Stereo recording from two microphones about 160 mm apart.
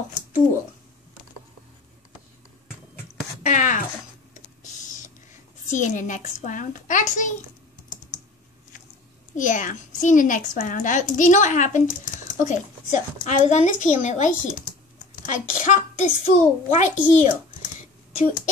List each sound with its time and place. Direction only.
3.4 s a woman's voice: 50° left (ahead or behind)
4.8 s speech: 55° left (ahead or behind)
9.4 s a woman's voice: 55° left (ahead or behind)